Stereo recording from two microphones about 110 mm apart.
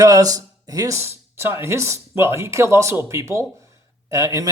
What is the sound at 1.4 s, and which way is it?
A man's voice, 20° right (ahead or behind).